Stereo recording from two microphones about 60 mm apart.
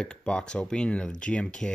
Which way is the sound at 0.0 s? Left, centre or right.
Centre.